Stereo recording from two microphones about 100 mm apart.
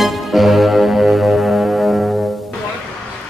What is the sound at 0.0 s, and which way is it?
Music, centre (ahead or behind).